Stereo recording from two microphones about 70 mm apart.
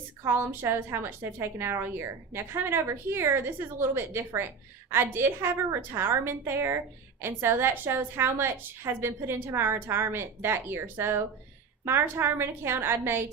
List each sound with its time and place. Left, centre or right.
0.3 s a woman's voice: right